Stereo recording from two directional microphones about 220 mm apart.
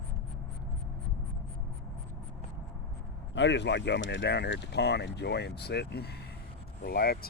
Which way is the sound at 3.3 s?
55° left (ahead or behind).